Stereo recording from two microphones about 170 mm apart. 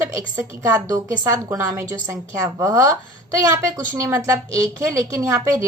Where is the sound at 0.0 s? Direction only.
15° right (ahead or behind).